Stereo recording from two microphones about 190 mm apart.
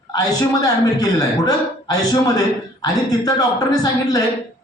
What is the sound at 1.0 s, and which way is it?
Speech, 20° left (ahead or behind).